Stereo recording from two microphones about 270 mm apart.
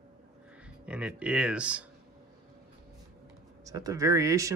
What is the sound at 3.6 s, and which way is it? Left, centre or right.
Speech, centre.